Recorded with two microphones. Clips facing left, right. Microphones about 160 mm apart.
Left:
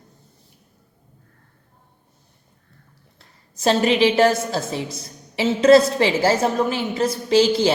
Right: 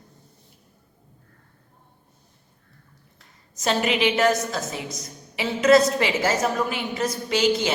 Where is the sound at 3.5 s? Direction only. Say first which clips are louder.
Left 5 dB; 30° left (ahead or behind).